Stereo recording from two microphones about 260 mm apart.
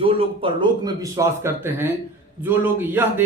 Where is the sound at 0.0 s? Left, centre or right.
Centre.